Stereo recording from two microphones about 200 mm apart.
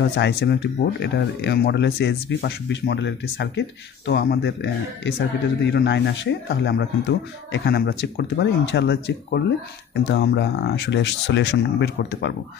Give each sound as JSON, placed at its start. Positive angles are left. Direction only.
{"t": 0.0, "sound": "speech", "side_deg": 60}